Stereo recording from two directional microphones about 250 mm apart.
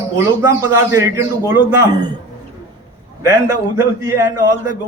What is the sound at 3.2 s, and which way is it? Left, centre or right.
A man's voice, centre.